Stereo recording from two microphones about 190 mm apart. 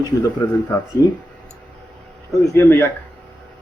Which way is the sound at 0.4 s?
20° left (ahead or behind).